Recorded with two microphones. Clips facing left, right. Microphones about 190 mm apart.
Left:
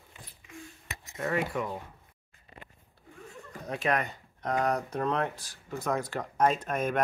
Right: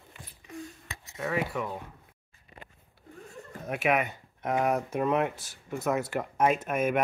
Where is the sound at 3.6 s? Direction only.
5° right (ahead or behind).